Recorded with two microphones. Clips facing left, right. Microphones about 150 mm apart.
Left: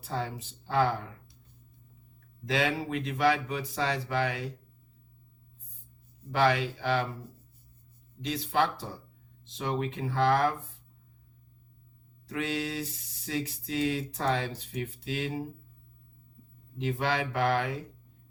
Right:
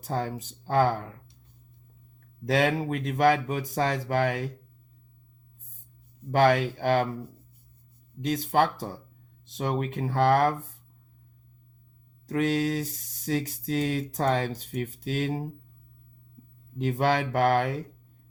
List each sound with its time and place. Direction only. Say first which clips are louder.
0.0 s speech: right 4 dB; 45° right (ahead or behind)
2.5 s speech: right 5 dB; 45° right (ahead or behind)
6.3 s speech: right 4 dB; 45° right (ahead or behind)
8.2 s speech: right 4 dB; 45° right (ahead or behind)
12.2 s speech: right 7 dB; 40° right (ahead or behind)
16.7 s speech: right 5 dB; 40° right (ahead or behind)